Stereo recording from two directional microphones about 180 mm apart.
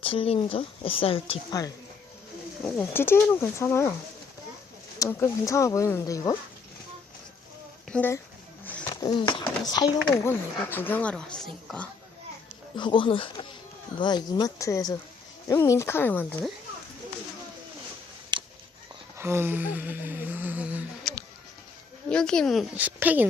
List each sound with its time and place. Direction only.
0.0 s speech: 30° left (ahead or behind)
2.6 s speech: 10° left (ahead or behind)
4.9 s speech: 15° left (ahead or behind)
7.9 s speech: 5° left (ahead or behind)
8.6 s music: 15° left (ahead or behind)
9.1 s speech: 25° left (ahead or behind)
10.1 s speech: 10° left (ahead or behind)
12.7 s speech: 25° left (ahead or behind)
18.3 s a sound: 25° right (ahead or behind)
19.1 s a sound: 15° right (ahead or behind)
22.1 s a woman's voice: 5° left (ahead or behind)